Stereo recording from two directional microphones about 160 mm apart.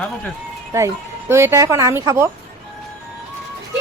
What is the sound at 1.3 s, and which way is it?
A woman's voice, 15° right (ahead or behind).